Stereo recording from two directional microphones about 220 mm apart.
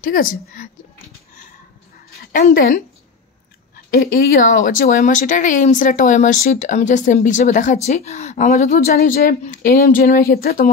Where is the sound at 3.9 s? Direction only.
40° left (ahead or behind).